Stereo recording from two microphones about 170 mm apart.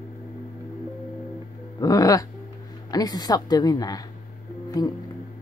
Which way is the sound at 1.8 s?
20° left (ahead or behind).